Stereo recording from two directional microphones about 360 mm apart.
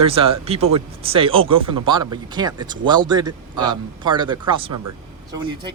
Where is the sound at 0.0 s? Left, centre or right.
Centre.